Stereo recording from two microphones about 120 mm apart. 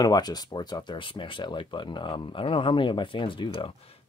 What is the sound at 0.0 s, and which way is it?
Speech, 35° left (ahead or behind).